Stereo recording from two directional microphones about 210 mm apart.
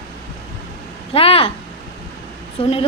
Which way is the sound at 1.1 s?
25° left (ahead or behind).